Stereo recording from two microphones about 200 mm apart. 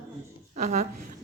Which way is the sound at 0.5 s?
35° right (ahead or behind).